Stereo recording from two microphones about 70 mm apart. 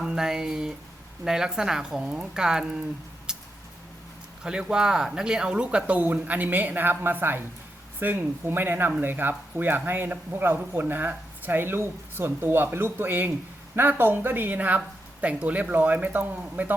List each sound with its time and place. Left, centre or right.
0.0 s speech: centre
3.3 s a sound: centre
4.4 s a man's voice: centre